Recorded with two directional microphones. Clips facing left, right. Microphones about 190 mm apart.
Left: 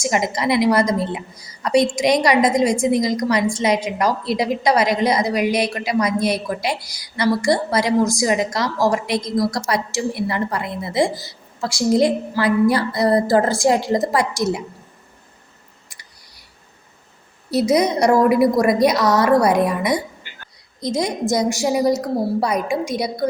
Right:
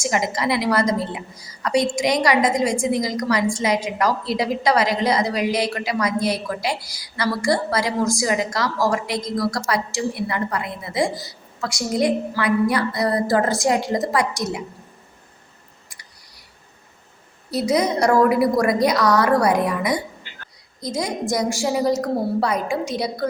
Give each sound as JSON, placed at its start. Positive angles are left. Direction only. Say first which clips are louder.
{"t": 0.0, "sound": "a woman's voice", "louder": "left 2 dB", "side_deg": 20}
{"t": 17.5, "sound": "a woman's voice", "louder": "left 3 dB", "side_deg": 20}